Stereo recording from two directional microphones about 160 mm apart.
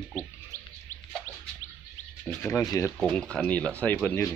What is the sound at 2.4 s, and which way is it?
Speech, 20° left (ahead or behind).